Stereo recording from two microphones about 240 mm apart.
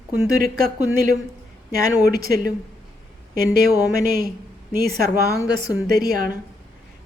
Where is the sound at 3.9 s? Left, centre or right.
Right.